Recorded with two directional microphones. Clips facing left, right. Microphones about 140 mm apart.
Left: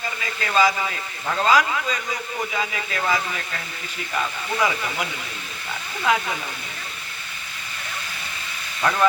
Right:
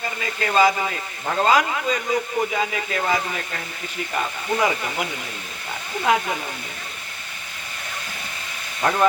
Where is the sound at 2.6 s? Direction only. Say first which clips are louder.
Right 3 dB; 40° right (ahead or behind).